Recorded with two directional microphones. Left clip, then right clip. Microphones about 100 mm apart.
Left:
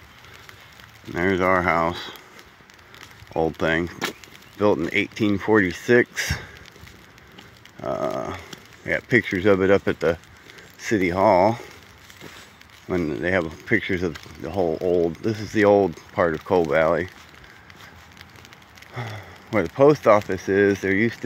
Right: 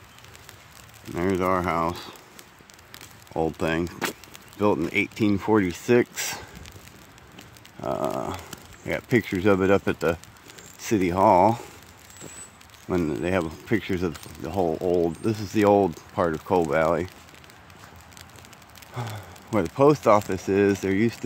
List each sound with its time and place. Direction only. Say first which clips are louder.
1.1 s speech: left 4 dB; 5° right (ahead or behind)
3.3 s speech: left 4 dB; 5° right (ahead or behind); by 6.4 s 25° right (ahead or behind)
7.8 s speech: left 2 dB; 25° right (ahead or behind)
12.8 s speech: left 1 dB; 15° right (ahead or behind)
13.1 s speech: left 3 dB; 25° right (ahead or behind)
16.3 s speech: left 2 dB; 10° right (ahead or behind)
18.9 s a sound: left 2 dB; 30° right (ahead or behind)
19.7 s speech: left 3 dB; 30° right (ahead or behind)